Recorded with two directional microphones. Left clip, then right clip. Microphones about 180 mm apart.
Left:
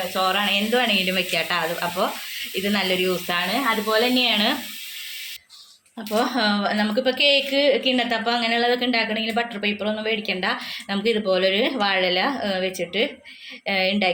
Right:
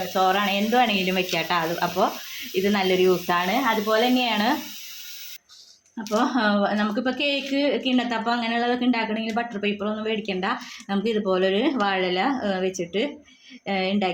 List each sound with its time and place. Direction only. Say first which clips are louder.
0.1 s a woman's voice: right 1 dB; 45° right (ahead or behind)
6.0 s a woman's voice: left 1 dB; 40° right (ahead or behind)